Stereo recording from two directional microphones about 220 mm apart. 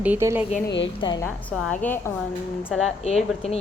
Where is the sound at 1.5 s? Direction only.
5° left (ahead or behind).